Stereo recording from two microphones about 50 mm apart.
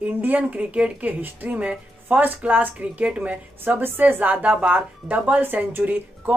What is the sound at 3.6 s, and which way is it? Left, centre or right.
Speech, right.